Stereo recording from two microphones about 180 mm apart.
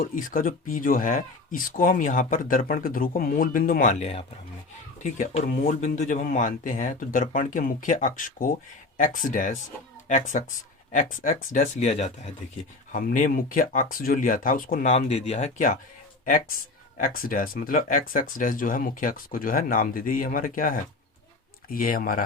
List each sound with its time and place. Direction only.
0.0 s speech: 50° left (ahead or behind)
12.9 s speech: 50° left (ahead or behind)
14.9 s speech: 35° left (ahead or behind); by 22.2 s 50° left (ahead or behind)